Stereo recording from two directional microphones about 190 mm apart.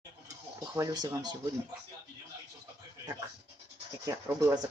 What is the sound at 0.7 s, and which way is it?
Speech, 20° right (ahead or behind).